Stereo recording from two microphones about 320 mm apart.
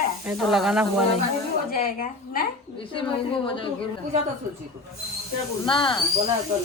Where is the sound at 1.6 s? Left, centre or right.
Left.